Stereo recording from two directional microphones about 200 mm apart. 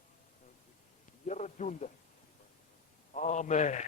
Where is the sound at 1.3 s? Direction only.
35° left (ahead or behind).